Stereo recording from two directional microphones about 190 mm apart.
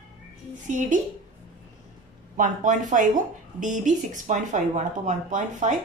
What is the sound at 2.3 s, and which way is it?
A woman's voice, 45° right (ahead or behind).